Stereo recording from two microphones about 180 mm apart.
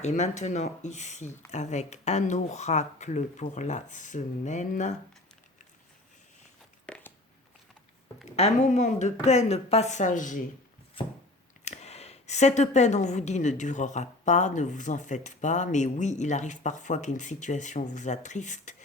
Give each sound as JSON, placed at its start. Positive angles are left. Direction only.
{"t": 0.0, "sound": "a woman's voice", "side_deg": 40}
{"t": 6.8, "sound": "a sound", "side_deg": 5}
{"t": 8.4, "sound": "a woman's voice", "side_deg": 40}
{"t": 11.6, "sound": "a woman's voice", "side_deg": 40}